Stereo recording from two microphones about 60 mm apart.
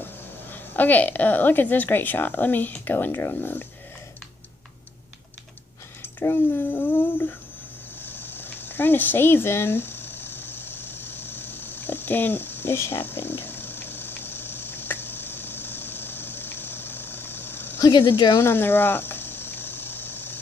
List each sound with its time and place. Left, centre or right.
0.0 s a woman's voice: left
6.1 s speech: left
8.0 s a sound: left
17.7 s speech: left
18.3 s cricket: left